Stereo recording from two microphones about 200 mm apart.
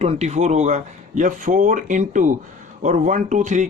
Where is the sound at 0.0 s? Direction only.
35° right (ahead or behind).